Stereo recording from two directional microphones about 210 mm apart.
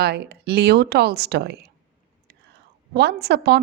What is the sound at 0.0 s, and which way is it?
A woman's voice, 50° right (ahead or behind).